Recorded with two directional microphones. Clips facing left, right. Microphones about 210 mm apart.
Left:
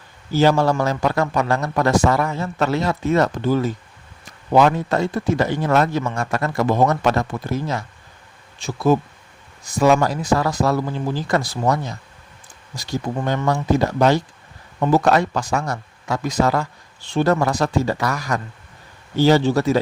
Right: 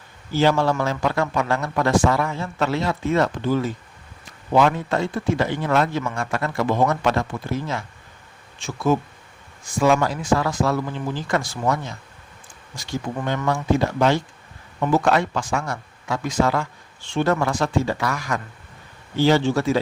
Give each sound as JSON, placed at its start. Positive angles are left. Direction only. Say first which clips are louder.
{"t": 0.3, "sound": "speech", "louder": "left 3 dB", "side_deg": 40}
{"t": 8.5, "sound": "speech", "louder": "left 3 dB", "side_deg": 35}